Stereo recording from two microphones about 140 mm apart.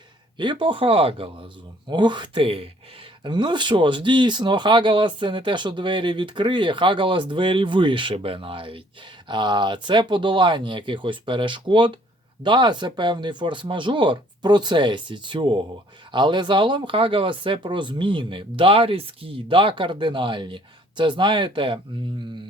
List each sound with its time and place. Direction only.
0.3 s speech: 35° right (ahead or behind)